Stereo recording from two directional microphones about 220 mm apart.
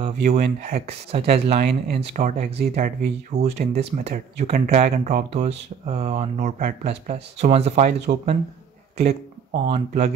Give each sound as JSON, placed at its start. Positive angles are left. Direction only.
{"t": 0.0, "sound": "speech", "side_deg": -30}
{"t": 9.7, "sound": "speech", "side_deg": -30}